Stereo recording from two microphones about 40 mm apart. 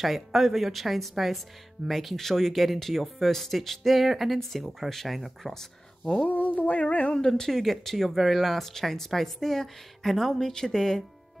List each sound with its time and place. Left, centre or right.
0.0 s speech: centre
5.5 s speech: centre
6.2 s a sound: left
7.2 s speech: centre